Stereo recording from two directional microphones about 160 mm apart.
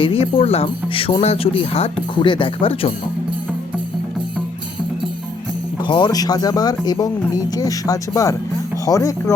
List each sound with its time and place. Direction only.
0.0 s speech: 35° left (ahead or behind)
5.8 s speech: 30° left (ahead or behind)